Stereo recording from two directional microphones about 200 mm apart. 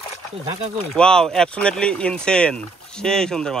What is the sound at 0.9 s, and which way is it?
Speech, 5° left (ahead or behind).